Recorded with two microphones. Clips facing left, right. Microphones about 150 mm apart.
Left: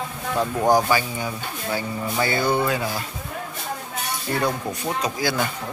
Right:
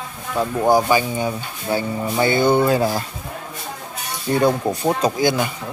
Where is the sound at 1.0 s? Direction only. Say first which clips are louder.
Right 6 dB; 25° right (ahead or behind).